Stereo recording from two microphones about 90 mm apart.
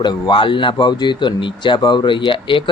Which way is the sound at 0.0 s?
60° left (ahead or behind).